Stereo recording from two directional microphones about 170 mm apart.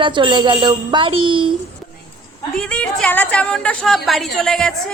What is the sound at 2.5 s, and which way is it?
A woman's voice, 5° left (ahead or behind).